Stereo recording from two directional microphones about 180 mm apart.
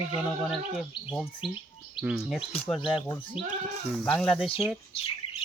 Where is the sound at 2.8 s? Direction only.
30° left (ahead or behind).